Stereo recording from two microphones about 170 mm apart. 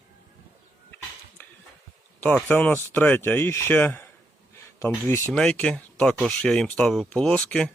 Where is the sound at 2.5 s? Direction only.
10° left (ahead or behind).